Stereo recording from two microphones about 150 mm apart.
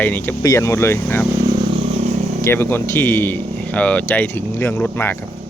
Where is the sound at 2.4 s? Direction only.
15° left (ahead or behind).